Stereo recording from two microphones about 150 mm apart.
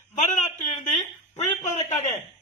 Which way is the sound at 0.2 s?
55° left (ahead or behind).